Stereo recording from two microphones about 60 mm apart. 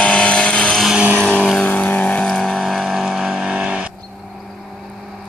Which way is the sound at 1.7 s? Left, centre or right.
Left.